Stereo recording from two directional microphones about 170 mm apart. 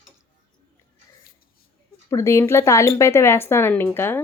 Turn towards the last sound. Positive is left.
turn(degrees=15)  # may be behind; listen again after turning